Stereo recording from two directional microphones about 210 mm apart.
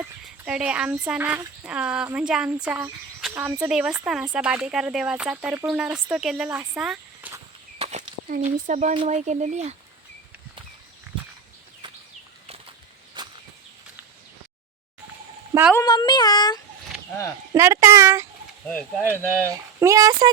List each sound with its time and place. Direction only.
0.0 s speech: 5° right (ahead or behind)
7.8 s speech: 35° right (ahead or behind)
13.2 s a sound: 20° right (ahead or behind)
15.7 s a sound: 20° left (ahead or behind)
17.5 s speech: 15° right (ahead or behind)
18.7 s speech: 5° left (ahead or behind)
19.5 s speech: 15° right (ahead or behind)